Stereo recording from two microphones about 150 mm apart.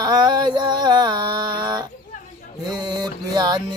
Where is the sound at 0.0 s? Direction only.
30° right (ahead or behind).